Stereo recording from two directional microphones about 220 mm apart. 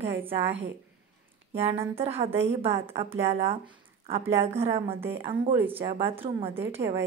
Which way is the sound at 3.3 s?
25° right (ahead or behind).